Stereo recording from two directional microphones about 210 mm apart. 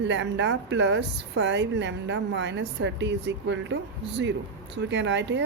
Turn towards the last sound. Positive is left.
turn(degrees=-55)  # may be behind; listen again after turning